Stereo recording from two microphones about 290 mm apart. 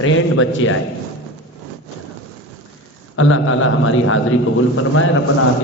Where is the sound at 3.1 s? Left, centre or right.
Left.